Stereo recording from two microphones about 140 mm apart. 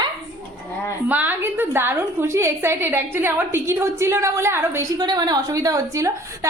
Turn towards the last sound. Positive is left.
turn(degrees=-20)  # may be behind; listen again after turning